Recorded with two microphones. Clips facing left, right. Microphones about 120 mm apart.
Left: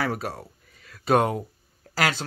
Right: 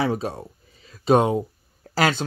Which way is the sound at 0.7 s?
60° left (ahead or behind).